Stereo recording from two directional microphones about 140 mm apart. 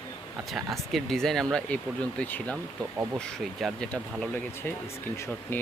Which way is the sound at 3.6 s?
5° left (ahead or behind).